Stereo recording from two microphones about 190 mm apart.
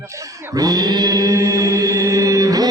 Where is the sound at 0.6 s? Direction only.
20° right (ahead or behind).